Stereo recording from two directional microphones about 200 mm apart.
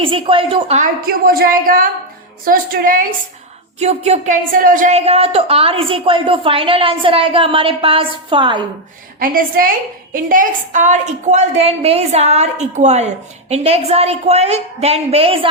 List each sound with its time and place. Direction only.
0.0 s a woman's voice: 25° right (ahead or behind)
1.0 s a woman's voice: 45° right (ahead or behind)
3.8 s a woman's voice: 30° right (ahead or behind)
4.5 s a woman's voice: 45° right (ahead or behind); by 8.6 s 25° right (ahead or behind)
9.1 s a woman's voice: 45° right (ahead or behind)